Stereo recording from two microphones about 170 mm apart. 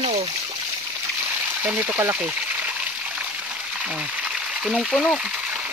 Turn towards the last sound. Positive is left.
turn(degrees=0)  # may be behind; listen again after turning